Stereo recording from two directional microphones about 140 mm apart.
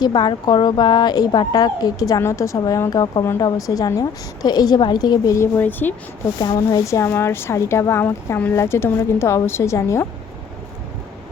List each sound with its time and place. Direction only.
0.0 s speech: 30° left (ahead or behind); by 5.9 s 15° left (ahead or behind)
6.4 s speech: 25° left (ahead or behind)